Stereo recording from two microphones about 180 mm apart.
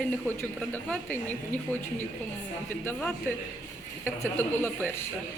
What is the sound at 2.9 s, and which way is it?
Speech, 5° left (ahead or behind).